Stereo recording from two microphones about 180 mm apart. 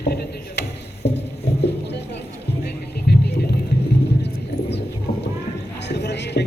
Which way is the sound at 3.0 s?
65° left (ahead or behind).